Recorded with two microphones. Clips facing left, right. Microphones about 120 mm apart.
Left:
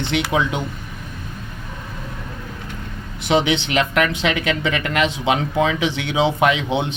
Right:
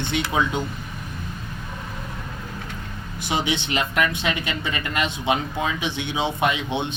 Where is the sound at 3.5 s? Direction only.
90° left.